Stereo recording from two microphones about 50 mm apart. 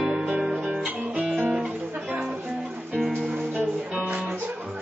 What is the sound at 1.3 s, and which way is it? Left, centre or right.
Music, right.